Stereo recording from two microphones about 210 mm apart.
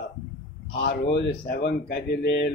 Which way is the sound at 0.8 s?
50° left (ahead or behind).